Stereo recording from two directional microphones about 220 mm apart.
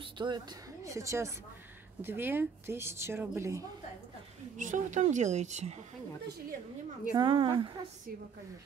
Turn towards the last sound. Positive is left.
turn(degrees=-25)  # may be behind; listen again after turning